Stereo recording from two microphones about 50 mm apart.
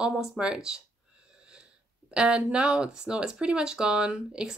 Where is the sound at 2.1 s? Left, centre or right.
Right.